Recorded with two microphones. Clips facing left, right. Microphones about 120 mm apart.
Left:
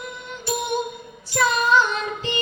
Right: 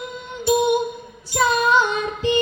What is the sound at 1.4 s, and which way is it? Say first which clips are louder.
Music: right 1 dB; 15° right (ahead or behind).